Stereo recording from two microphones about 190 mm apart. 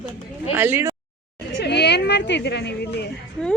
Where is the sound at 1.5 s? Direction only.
60° left (ahead or behind).